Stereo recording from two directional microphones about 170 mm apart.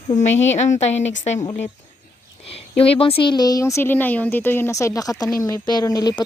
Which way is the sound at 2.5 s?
35° left (ahead or behind).